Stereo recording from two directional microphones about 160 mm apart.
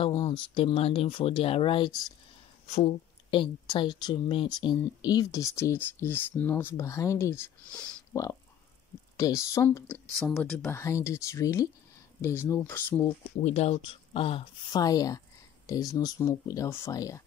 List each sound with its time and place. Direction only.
0.0 s speech: 30° left (ahead or behind); by 10.0 s 10° left (ahead or behind)
10.1 s speech: centre (ahead or behind)
13.4 s speech: 45° left (ahead or behind); by 17.2 s 20° left (ahead or behind)